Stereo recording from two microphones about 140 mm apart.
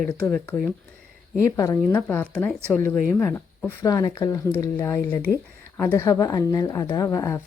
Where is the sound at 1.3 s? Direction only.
25° left (ahead or behind).